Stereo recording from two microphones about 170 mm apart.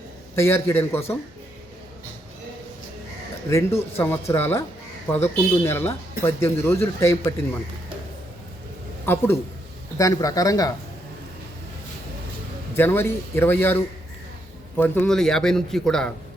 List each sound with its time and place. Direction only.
0.3 s a man's voice: 15° left (ahead or behind)
3.5 s a man's voice: 15° left (ahead or behind)
9.0 s a man's voice: 15° left (ahead or behind)
12.7 s a man's voice: 15° left (ahead or behind)